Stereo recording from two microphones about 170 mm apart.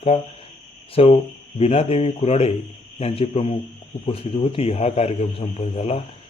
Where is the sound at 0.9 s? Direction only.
35° left (ahead or behind).